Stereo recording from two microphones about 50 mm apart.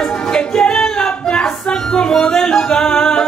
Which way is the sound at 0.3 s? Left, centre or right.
Centre.